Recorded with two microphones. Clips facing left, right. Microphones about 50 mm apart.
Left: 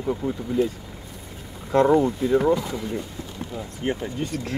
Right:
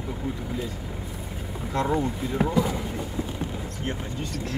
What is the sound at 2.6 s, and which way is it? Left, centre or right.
Speech, centre.